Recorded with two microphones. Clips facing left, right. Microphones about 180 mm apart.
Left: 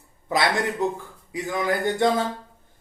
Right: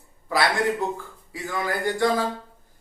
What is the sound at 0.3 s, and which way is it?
A man's voice, 20° left (ahead or behind).